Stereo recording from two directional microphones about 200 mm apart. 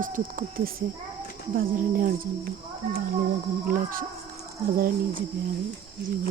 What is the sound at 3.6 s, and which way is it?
Cricket, 45° right (ahead or behind).